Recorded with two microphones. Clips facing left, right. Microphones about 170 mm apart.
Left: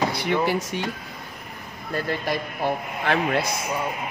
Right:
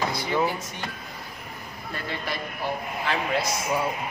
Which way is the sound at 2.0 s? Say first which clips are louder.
Left 4 dB; 50° left (ahead or behind).